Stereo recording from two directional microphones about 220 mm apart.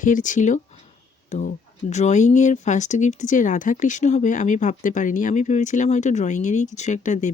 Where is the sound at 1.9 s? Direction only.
30° left (ahead or behind).